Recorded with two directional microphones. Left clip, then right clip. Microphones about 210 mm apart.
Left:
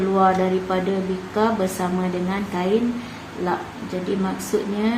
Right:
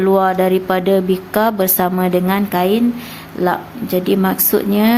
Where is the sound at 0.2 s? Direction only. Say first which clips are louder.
Right 4 dB; 55° right (ahead or behind).